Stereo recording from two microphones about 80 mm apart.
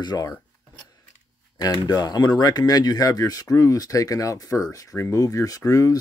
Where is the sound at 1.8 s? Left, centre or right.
Left.